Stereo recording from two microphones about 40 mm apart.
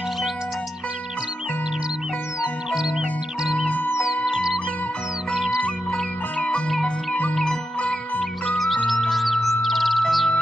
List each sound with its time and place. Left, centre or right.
4.3 s music: centre
5.3 s music: centre
6.7 s music: centre
8.5 s music: centre